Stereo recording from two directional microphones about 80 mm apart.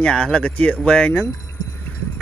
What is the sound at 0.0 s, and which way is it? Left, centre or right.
Speech, centre.